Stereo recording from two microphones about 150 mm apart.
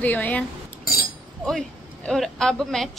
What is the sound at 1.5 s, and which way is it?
Speech, centre (ahead or behind).